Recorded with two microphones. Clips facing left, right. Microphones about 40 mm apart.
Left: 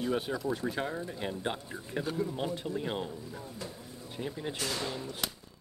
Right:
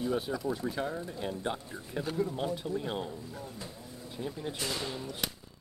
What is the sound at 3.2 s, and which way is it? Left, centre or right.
Speech, left.